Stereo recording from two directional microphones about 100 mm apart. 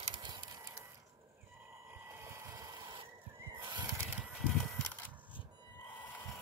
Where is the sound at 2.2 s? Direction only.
25° right (ahead or behind).